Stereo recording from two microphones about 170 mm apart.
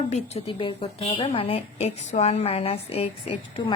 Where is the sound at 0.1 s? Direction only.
40° left (ahead or behind).